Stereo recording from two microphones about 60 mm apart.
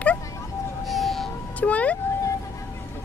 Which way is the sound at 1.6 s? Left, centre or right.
Left.